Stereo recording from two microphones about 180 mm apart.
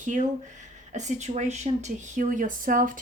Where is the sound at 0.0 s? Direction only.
45° right (ahead or behind).